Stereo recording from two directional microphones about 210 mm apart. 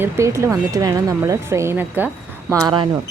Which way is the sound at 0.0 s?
15° right (ahead or behind).